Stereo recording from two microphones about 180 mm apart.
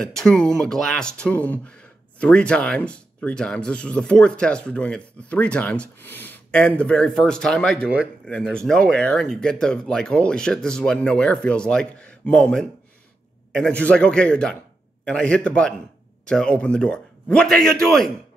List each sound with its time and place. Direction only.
0.0 s speech: 5° left (ahead or behind)